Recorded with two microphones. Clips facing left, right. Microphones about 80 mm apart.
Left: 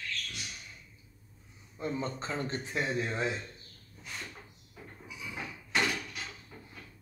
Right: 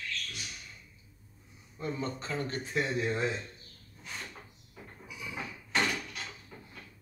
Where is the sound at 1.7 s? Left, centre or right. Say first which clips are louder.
Left 1 dB; left.